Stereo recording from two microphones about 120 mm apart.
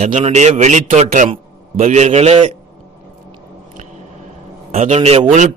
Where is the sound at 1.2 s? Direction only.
60° right (ahead or behind).